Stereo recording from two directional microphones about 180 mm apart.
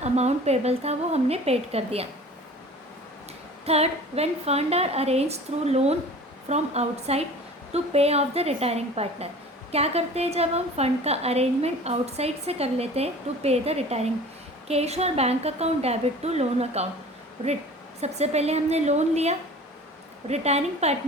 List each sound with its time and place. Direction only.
0.0 s a woman's voice: 35° right (ahead or behind)
3.7 s a woman's voice: 35° right (ahead or behind)
18.0 s a woman's voice: 35° right (ahead or behind)